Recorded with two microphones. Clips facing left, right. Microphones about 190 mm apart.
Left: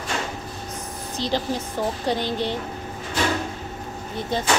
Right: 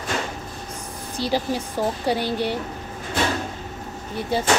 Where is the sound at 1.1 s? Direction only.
10° right (ahead or behind).